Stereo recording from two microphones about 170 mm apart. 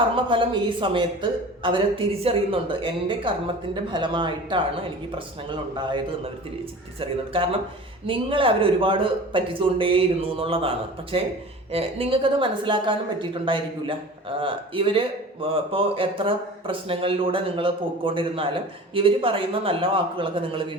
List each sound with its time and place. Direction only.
0.3 s a man's voice: 30° right (ahead or behind)
5.7 s a man's voice: 25° right (ahead or behind)
8.0 s a man's voice: 30° right (ahead or behind)